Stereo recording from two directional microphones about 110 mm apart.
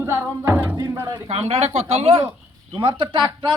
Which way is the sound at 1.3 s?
70° right (ahead or behind).